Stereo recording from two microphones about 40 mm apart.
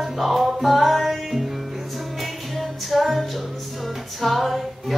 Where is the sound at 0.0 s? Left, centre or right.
Centre.